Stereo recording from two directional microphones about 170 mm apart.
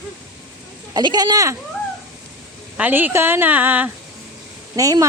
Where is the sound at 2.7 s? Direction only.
10° right (ahead or behind).